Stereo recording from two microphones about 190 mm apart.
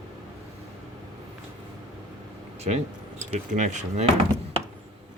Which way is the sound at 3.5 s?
40° right (ahead or behind).